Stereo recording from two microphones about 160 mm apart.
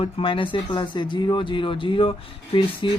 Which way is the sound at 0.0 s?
35° left (ahead or behind).